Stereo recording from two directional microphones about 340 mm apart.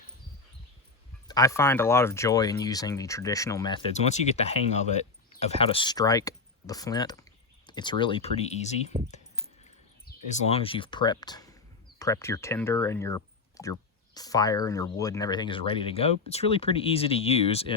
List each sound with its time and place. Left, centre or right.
1.3 s speech: centre
10.1 s speech: left